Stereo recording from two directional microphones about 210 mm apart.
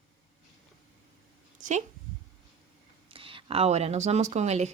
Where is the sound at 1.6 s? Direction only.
35° right (ahead or behind).